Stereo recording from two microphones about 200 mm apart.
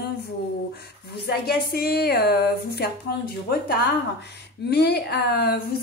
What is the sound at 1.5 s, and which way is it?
A woman's voice, 50° left (ahead or behind).